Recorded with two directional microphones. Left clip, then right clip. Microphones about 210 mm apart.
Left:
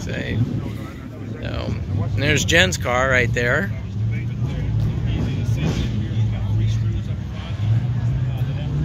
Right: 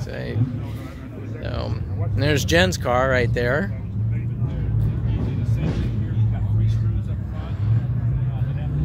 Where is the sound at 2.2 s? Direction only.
25° right (ahead or behind).